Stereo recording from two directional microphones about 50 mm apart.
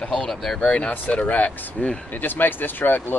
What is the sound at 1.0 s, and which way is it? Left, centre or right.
Speech, left.